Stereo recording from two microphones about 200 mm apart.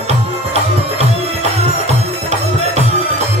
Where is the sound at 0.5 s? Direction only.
30° right (ahead or behind).